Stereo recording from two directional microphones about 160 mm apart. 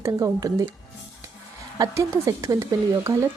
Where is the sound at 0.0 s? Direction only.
20° right (ahead or behind).